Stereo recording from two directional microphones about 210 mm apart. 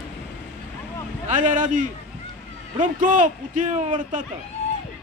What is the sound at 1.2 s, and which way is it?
A man's voice, 35° right (ahead or behind).